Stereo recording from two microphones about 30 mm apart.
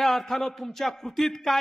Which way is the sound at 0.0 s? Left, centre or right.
Centre.